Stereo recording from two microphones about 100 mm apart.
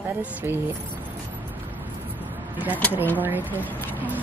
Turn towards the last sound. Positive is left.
turn(degrees=-15)  # may be behind; listen again after turning